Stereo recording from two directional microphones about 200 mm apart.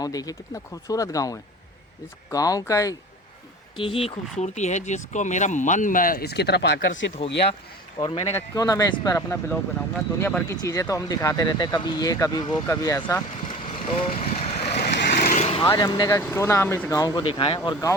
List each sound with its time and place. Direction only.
0.0 s speech: 20° left (ahead or behind)
3.8 s speech: 25° left (ahead or behind); by 6.7 s 55° left (ahead or behind)
7.9 s speech: 25° left (ahead or behind)
13.5 s vehicle: 30° left (ahead or behind)
14.9 s vehicle: 45° left (ahead or behind)
15.7 s speech: 20° left (ahead or behind)